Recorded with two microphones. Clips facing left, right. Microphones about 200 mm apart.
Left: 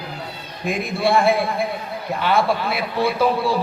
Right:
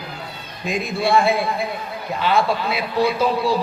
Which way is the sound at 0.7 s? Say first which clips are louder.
Even; 55° left (ahead or behind).